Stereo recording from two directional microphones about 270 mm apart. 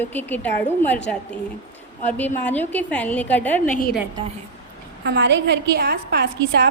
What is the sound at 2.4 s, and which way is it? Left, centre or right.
A woman's voice, centre.